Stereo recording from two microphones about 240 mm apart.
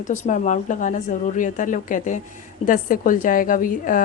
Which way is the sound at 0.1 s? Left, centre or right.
Left.